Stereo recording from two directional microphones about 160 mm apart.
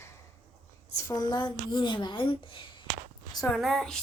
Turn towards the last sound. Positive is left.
turn(degrees=0)  # may be behind; listen again after turning